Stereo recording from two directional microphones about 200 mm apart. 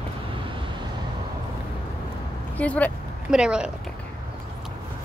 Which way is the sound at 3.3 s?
5° right (ahead or behind).